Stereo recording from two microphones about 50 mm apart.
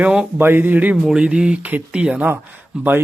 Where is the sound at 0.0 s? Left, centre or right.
Right.